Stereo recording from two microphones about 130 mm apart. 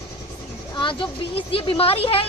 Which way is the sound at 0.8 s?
40° left (ahead or behind).